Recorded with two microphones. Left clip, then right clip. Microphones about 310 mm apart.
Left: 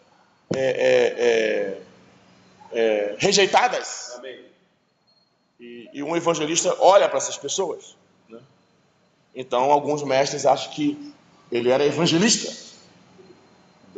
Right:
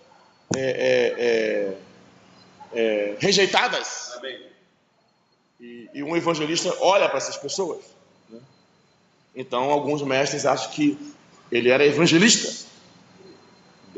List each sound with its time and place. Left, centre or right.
0.6 s a man's voice: left
2.7 s a man's voice: left
5.6 s a man's voice: left
9.3 s a man's voice: left